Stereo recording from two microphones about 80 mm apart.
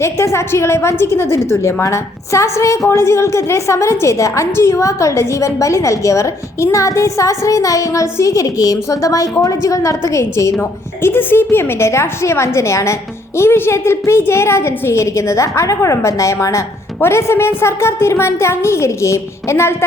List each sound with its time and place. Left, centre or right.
0.0 s a woman's voice: left
10.6 s a woman's voice: left